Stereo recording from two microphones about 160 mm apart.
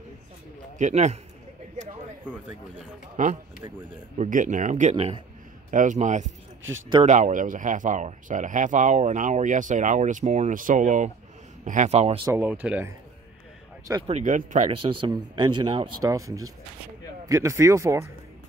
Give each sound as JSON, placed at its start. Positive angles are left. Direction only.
{"t": 0.7, "sound": "speech", "side_deg": -45}
{"t": 3.2, "sound": "speech", "side_deg": -55}
{"t": 4.9, "sound": "speech", "side_deg": -40}
{"t": 5.7, "sound": "speech", "side_deg": -55}
{"t": 12.3, "sound": "speech", "side_deg": -10}
{"t": 14.0, "sound": "speech", "side_deg": -50}
{"t": 14.7, "sound": "speech", "side_deg": -35}
{"t": 16.0, "sound": "speech", "side_deg": -20}